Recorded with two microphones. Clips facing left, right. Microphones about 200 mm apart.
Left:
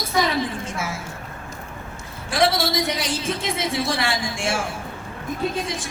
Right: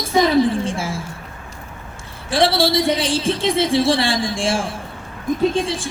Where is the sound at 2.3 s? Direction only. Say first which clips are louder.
Right 4 dB; 30° right (ahead or behind).